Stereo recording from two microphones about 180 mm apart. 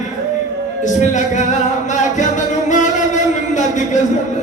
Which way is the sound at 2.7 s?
40° left (ahead or behind).